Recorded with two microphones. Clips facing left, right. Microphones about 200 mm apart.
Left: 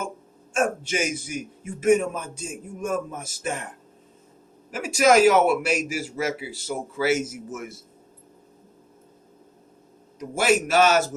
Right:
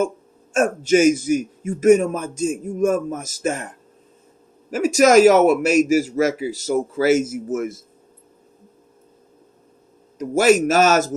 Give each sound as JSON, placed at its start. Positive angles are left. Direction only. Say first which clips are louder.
{"t": 0.5, "sound": "a man's voice", "louder": "right 8 dB", "side_deg": -40}
{"t": 4.7, "sound": "a man's voice", "louder": "right 5 dB", "side_deg": -45}
{"t": 10.2, "sound": "a man's voice", "louder": "right 7 dB", "side_deg": -45}